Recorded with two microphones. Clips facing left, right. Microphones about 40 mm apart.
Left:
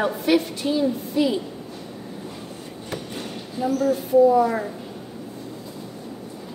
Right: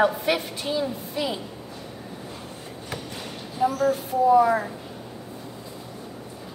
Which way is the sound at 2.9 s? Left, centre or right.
Centre.